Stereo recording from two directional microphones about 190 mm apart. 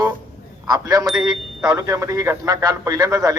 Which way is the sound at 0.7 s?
20° right (ahead or behind).